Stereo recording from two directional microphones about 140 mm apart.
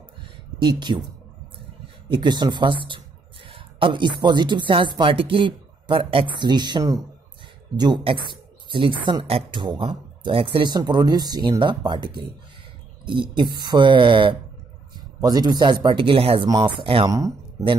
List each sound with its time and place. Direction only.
0.2 s a sound: 35° right (ahead or behind)
2.0 s speech: 35° right (ahead or behind)
16.4 s speech: 30° right (ahead or behind)